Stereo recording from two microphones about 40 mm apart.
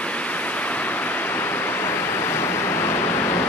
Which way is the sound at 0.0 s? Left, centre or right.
Left.